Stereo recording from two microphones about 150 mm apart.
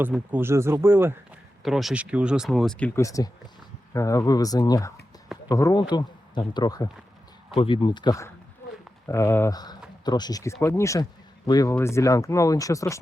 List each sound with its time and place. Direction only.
0.3 s speech: 15° right (ahead or behind)
1.6 s speech: centre (ahead or behind)
3.0 s speech: 20° left (ahead or behind)